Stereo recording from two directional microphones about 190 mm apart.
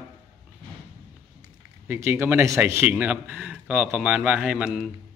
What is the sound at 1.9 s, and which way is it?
Speech, 15° right (ahead or behind).